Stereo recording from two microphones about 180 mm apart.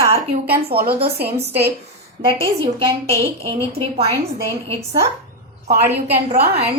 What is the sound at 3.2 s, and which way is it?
Speech, 35° right (ahead or behind).